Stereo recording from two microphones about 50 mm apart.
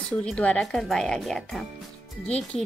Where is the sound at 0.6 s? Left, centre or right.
Centre.